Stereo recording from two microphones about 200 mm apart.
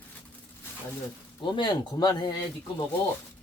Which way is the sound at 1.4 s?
25° left (ahead or behind).